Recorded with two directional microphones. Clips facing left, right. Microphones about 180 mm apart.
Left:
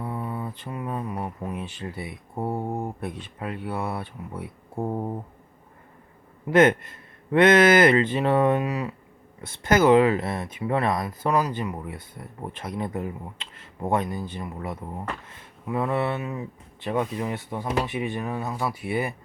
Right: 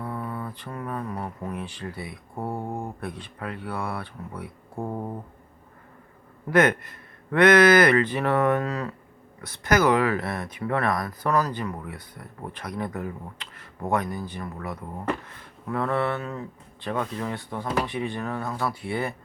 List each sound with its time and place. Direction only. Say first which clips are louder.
0.0 s speech: left 1 dB; 15° left (ahead or behind)
2.5 s speech: left 3 dB; 10° left (ahead or behind)
3.0 s speech: left 1 dB; 20° left (ahead or behind)
4.7 s speech: left 3 dB; 10° left (ahead or behind)
6.5 s speech: left 3 dB; 25° left (ahead or behind)
9.4 s speech: left 2 dB; 25° left (ahead or behind)